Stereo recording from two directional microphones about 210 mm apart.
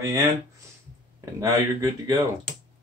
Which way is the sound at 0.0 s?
15° right (ahead or behind).